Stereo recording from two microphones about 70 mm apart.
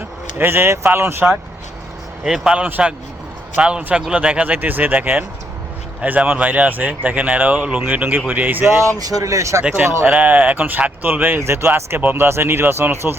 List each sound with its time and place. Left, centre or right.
0.3 s speech: right
2.2 s a man's voice: centre
2.6 s a man's voice: right
8.6 s speech: right
9.0 s speech: right
10.1 s speech: right